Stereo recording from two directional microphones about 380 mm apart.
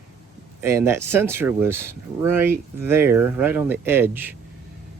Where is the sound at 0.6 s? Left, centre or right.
Centre.